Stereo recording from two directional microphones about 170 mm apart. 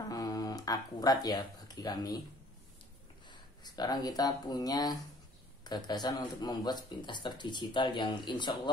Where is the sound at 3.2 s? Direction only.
25° left (ahead or behind).